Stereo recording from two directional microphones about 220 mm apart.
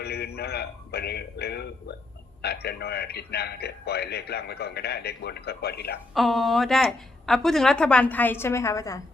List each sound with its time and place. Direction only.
0.0 s a man's voice: 45° left (ahead or behind)
6.1 s a woman's voice: centre (ahead or behind)